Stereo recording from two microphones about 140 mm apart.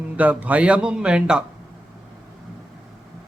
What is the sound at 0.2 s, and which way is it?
A man's voice, 10° right (ahead or behind).